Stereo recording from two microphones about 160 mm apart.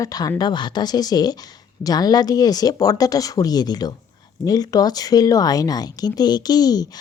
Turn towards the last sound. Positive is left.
turn(degrees=25)  # may be behind; listen again after turning